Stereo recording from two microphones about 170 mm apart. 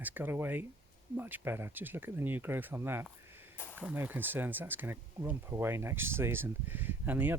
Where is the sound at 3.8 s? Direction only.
10° right (ahead or behind).